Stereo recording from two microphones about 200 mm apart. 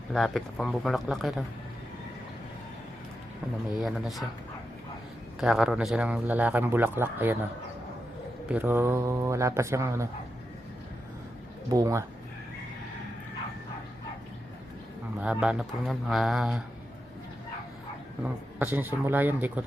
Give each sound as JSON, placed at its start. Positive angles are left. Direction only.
{"t": 0.1, "sound": "speech", "side_deg": 0}
{"t": 3.8, "sound": "speech", "side_deg": 0}
{"t": 5.4, "sound": "a man's voice", "side_deg": 0}
{"t": 8.4, "sound": "a man's voice", "side_deg": -10}
{"t": 11.7, "sound": "a man's voice", "side_deg": -15}
{"t": 15.2, "sound": "speech", "side_deg": -5}
{"t": 18.6, "sound": "a man's voice", "side_deg": -10}